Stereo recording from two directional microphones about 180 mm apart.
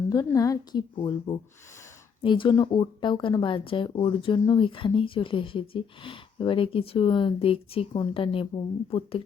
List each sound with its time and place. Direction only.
0.1 s speech: 20° left (ahead or behind)